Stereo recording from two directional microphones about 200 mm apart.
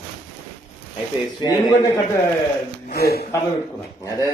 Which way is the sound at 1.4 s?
15° left (ahead or behind).